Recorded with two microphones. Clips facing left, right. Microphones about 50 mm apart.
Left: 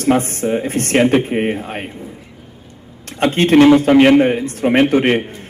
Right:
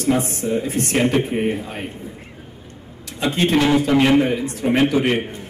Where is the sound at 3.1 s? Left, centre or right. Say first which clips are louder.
Left 7 dB; left.